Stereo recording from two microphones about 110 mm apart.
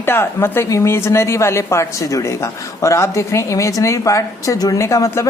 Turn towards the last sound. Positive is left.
turn(degrees=30)  # may be behind; listen again after turning